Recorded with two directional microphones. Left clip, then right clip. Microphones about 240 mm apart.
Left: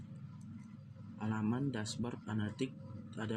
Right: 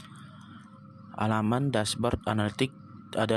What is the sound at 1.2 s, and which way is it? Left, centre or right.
Speech, right.